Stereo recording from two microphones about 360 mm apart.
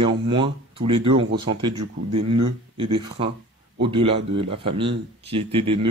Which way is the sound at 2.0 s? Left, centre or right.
Right.